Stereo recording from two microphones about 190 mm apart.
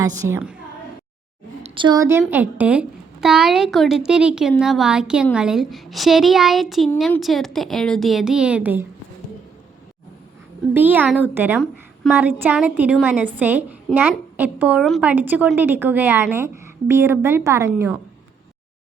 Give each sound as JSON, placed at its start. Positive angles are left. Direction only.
{"t": 0.3, "sound": "a woman's voice", "side_deg": -10}
{"t": 1.6, "sound": "a woman's voice", "side_deg": -25}
{"t": 10.8, "sound": "a woman's voice", "side_deg": -10}